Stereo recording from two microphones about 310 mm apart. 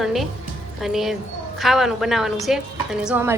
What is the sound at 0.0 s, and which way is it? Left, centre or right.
Music, centre.